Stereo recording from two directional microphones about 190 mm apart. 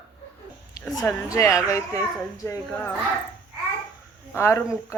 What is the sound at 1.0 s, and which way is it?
Speech, 15° left (ahead or behind).